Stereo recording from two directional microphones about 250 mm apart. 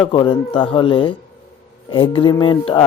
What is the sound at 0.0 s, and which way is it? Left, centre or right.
Speech, centre.